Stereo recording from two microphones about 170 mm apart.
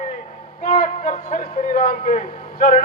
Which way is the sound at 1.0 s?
45° left (ahead or behind).